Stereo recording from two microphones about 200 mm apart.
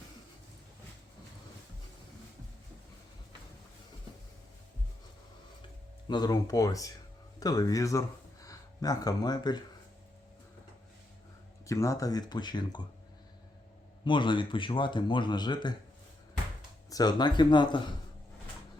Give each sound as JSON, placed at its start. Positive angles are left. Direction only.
{"t": 6.1, "sound": "speech", "side_deg": 20}
{"t": 11.6, "sound": "speech", "side_deg": 15}
{"t": 14.0, "sound": "speech", "side_deg": 25}
{"t": 16.9, "sound": "speech", "side_deg": 20}